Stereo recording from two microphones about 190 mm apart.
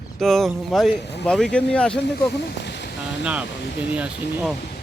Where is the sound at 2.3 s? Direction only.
60° left (ahead or behind).